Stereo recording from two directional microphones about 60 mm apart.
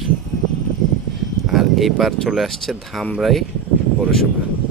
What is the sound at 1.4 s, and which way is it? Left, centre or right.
Speech, centre.